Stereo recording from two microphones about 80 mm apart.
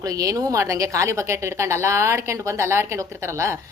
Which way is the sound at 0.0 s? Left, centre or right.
Right.